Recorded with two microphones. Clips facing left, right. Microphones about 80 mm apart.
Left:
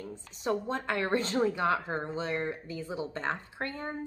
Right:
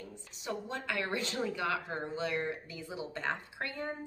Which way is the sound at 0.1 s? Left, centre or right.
Left.